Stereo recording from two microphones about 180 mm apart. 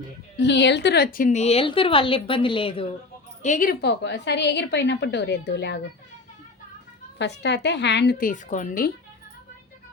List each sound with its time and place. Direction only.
0.3 s a woman's voice: 75° left (ahead or behind); by 2.9 s 30° left (ahead or behind)
3.4 s a woman's voice: 45° left (ahead or behind); by 5.8 s 70° left (ahead or behind)
7.2 s a woman's voice: 75° left (ahead or behind)
8.2 s speech: 45° left (ahead or behind)